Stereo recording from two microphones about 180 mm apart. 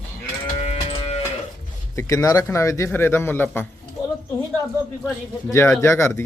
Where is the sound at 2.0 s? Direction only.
15° left (ahead or behind).